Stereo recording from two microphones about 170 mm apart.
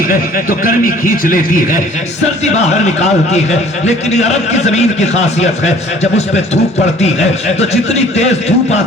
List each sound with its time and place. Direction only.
0.1 s speech: 55° left (ahead or behind)
2.4 s a man's voice: 40° left (ahead or behind)